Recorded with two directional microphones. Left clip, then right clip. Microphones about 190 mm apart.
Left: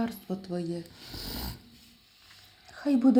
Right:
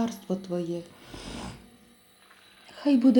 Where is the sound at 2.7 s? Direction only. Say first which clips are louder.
Right 3 dB; 5° left (ahead or behind).